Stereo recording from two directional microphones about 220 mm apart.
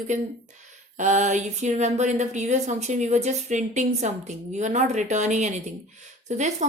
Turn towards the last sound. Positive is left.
turn(degrees=-30)  # may be behind; listen again after turning